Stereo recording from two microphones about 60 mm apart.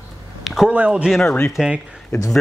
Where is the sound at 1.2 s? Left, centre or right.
Centre.